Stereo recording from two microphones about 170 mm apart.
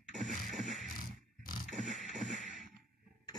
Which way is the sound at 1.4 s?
55° left (ahead or behind).